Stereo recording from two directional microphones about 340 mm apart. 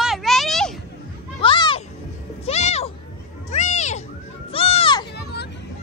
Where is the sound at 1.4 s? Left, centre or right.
Centre.